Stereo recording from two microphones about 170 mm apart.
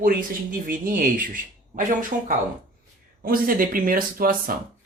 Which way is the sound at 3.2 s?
55° right (ahead or behind).